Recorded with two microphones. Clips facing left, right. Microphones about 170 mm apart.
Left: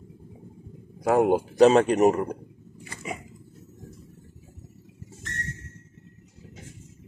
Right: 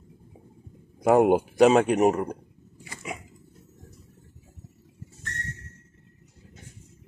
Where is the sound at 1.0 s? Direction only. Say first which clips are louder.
Right 2 dB; 20° right (ahead or behind).